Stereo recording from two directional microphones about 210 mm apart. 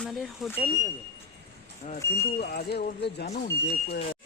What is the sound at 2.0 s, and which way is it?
Speech, 50° left (ahead or behind).